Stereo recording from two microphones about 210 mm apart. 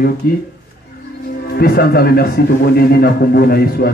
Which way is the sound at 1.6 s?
45° left (ahead or behind).